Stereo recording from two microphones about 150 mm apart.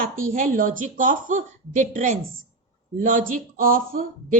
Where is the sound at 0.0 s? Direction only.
65° right (ahead or behind).